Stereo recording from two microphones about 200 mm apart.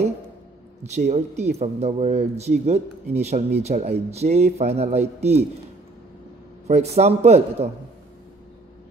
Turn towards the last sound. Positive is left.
turn(degrees=-30)  # may be behind; listen again after turning